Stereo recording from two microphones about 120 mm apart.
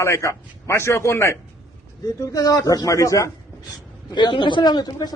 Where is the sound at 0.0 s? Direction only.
25° left (ahead or behind).